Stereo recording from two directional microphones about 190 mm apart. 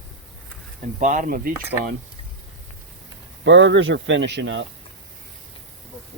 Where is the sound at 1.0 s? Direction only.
40° right (ahead or behind).